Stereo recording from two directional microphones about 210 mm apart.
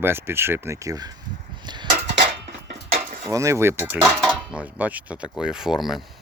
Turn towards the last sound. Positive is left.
turn(degrees=0)  # may be behind; listen again after turning